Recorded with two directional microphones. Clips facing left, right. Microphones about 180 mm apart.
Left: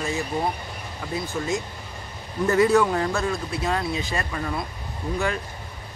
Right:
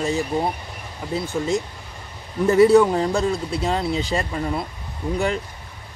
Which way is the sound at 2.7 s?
20° right (ahead or behind).